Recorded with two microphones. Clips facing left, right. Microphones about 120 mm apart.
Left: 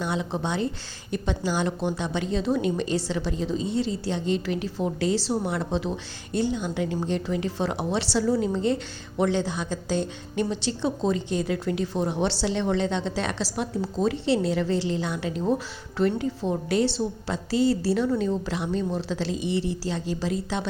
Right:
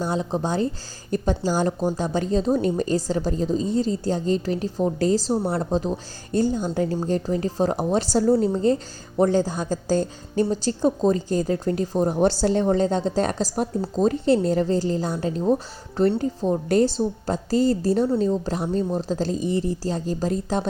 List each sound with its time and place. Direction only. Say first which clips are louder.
0.0 s speech: right 3 dB; 35° right (ahead or behind)